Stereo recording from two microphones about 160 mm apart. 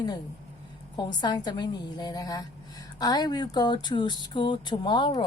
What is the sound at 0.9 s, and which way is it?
Speech, 25° left (ahead or behind).